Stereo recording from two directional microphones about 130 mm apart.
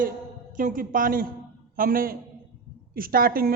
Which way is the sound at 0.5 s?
90° right.